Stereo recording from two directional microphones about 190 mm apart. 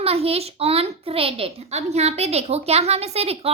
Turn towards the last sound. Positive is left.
turn(degrees=-30)  # may be behind; listen again after turning